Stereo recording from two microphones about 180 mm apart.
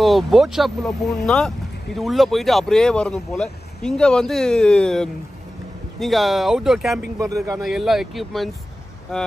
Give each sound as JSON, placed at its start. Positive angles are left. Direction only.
{"t": 0.0, "sound": "speech", "side_deg": 0}
{"t": 7.2, "sound": "speech", "side_deg": -20}
{"t": 7.6, "sound": "speech", "side_deg": 0}